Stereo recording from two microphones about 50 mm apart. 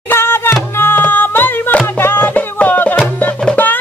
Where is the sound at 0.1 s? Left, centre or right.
Left.